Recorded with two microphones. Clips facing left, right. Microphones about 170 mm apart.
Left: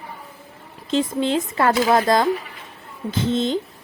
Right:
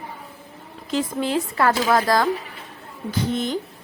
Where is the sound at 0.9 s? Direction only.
25° left (ahead or behind).